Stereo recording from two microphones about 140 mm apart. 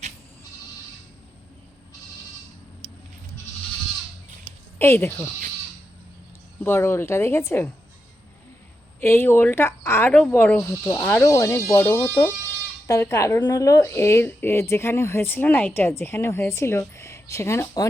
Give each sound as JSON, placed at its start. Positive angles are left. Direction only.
{"t": 4.8, "sound": "speech", "side_deg": 15}
{"t": 6.6, "sound": "speech", "side_deg": 15}
{"t": 9.0, "sound": "speech", "side_deg": 15}